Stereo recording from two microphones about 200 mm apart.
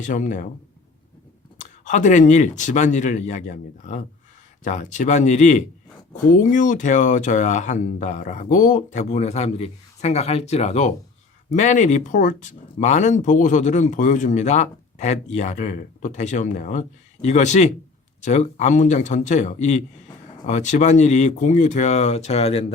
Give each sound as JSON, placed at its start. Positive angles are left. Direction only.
{"t": 0.0, "sound": "speech", "side_deg": 40}
{"t": 1.5, "sound": "speech", "side_deg": 40}